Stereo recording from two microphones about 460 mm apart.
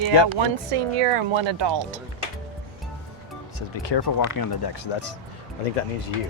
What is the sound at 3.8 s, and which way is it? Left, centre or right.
Speech, left.